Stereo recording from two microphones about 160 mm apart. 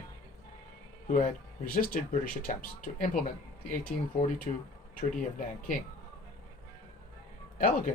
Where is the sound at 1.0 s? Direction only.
55° left (ahead or behind).